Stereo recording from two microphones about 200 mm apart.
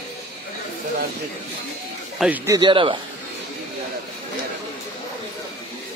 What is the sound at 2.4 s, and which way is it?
Speech, 20° right (ahead or behind).